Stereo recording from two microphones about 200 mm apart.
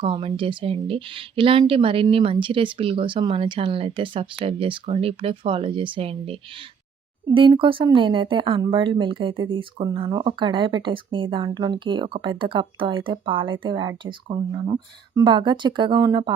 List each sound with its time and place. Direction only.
0.0 s speech: 30° right (ahead or behind)